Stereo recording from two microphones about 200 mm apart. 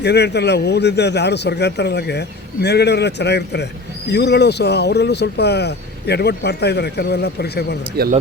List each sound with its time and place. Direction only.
0.0 s a man's voice: 55° left (ahead or behind)
8.0 s speech: 50° right (ahead or behind)